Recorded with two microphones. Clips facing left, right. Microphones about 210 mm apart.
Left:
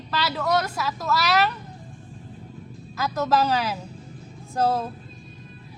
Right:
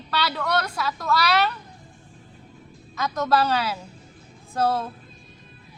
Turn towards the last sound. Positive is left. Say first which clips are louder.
# left 1 dB
turn(degrees=10)  # may be behind; listen again after turning